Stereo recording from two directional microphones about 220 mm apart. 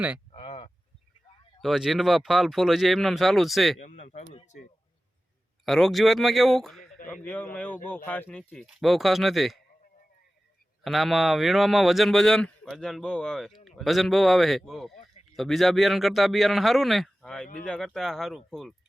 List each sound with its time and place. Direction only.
0.3 s a sound: 25° left (ahead or behind)
1.6 s speech: centre (ahead or behind)
3.8 s speech: 35° left (ahead or behind)
5.6 s speech: centre (ahead or behind)
10.8 s speech: centre (ahead or behind)